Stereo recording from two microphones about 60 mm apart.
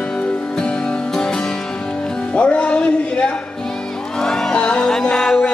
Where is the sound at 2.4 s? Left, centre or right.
Centre.